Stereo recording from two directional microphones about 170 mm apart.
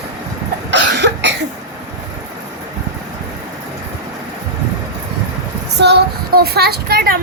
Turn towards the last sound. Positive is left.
turn(degrees=-65)  # may be behind; listen again after turning